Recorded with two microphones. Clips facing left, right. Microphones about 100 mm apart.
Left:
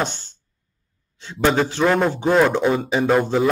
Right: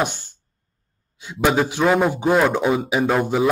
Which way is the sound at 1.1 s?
10° right (ahead or behind).